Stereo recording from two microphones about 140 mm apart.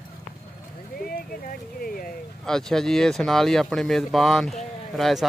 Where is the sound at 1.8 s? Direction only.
90° left.